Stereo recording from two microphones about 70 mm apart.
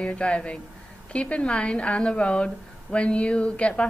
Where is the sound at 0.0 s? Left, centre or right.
Centre.